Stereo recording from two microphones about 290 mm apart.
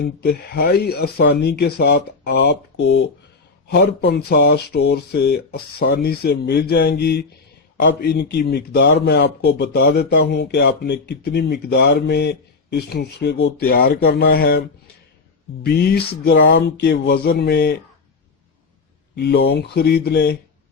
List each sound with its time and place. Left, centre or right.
0.0 s speech: left
15.6 s speech: left
19.1 s speech: left